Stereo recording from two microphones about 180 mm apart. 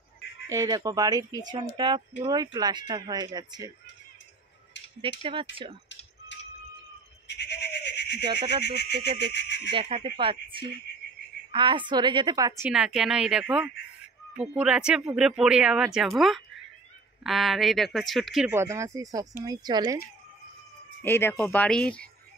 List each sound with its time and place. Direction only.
0.5 s speech: 20° right (ahead or behind)
5.2 s speech: 30° right (ahead or behind)
6.3 s a sound: 90° left
7.2 s a sound: 70° left (ahead or behind)
8.7 s speech: 65° left (ahead or behind)
9.7 s speech: 30° right (ahead or behind)
12.7 s speech: 5° right (ahead or behind)
18.5 s speech: 15° right (ahead or behind)
21.0 s speech: 10° left (ahead or behind)